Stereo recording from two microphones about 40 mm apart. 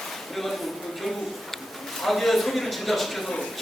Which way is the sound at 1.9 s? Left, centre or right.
Centre.